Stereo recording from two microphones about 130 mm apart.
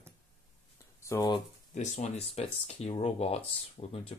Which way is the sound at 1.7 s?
60° left (ahead or behind).